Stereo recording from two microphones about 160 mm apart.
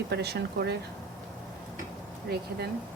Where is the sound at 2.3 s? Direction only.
90° right.